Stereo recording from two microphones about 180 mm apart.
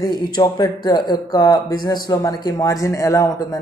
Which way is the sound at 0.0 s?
20° left (ahead or behind).